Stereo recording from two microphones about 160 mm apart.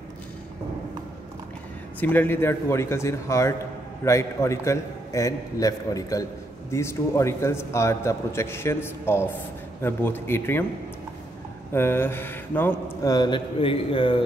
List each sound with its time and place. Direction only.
2.0 s a man's voice: 10° left (ahead or behind)
11.7 s a man's voice: 15° left (ahead or behind); by 14.2 s 35° left (ahead or behind)